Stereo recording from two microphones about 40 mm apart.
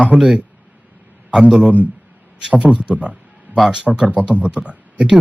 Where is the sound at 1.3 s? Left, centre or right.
Centre.